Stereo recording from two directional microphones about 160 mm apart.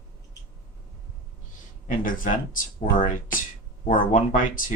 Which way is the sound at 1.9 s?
55° left (ahead or behind).